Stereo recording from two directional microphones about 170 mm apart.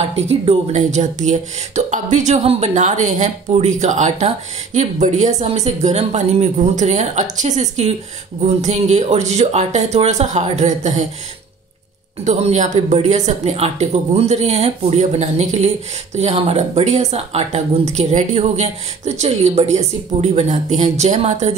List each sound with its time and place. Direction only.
0.1 s speech: 35° right (ahead or behind)
12.3 s speech: 45° right (ahead or behind)